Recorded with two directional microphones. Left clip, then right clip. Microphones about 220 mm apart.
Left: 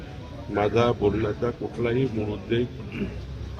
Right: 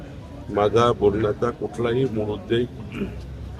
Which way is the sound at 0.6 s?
15° right (ahead or behind).